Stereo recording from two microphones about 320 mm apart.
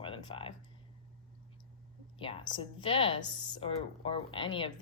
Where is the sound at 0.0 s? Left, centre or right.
Centre.